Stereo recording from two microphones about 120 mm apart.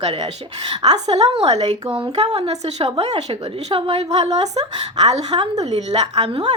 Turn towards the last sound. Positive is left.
turn(degrees=-65)  # may be behind; listen again after turning